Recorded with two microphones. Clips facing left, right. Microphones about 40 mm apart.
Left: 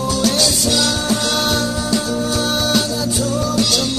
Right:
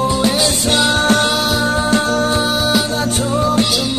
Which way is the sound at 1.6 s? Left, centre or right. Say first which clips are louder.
Right 5 dB; right.